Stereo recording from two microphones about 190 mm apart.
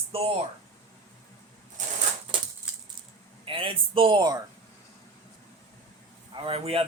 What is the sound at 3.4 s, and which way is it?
Speech, 30° right (ahead or behind).